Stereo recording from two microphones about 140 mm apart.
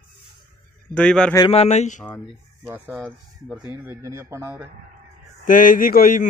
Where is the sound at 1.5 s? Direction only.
50° left (ahead or behind).